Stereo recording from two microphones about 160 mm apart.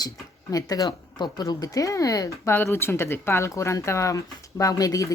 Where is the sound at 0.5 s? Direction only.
20° left (ahead or behind).